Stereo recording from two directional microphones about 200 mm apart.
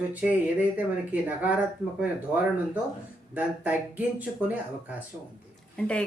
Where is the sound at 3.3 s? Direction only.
5° right (ahead or behind).